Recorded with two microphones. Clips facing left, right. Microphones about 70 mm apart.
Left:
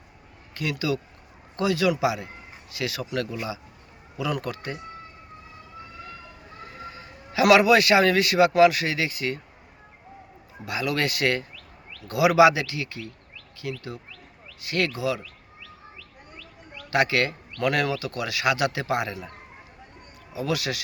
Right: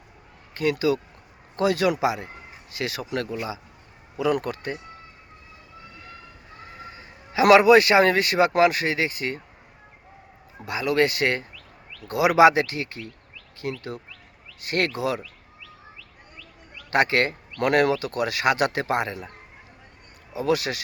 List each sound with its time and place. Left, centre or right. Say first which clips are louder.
0.5 s speech: right 5 dB; right
6.8 s a man's voice: left 2 dB; right
10.7 s speech: right 4 dB; right
13.6 s speech: right 3 dB; right
16.9 s speech: right 2 dB; right
20.3 s speech: right 4 dB; right